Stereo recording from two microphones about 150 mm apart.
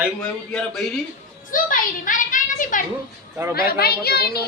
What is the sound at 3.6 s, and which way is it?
Speech, 90° left.